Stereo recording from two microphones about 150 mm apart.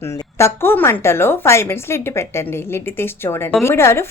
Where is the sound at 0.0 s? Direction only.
20° left (ahead or behind).